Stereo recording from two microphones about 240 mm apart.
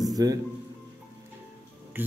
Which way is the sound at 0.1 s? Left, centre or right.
Centre.